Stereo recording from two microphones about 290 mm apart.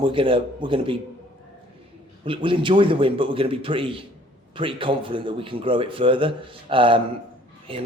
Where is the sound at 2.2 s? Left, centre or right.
Centre.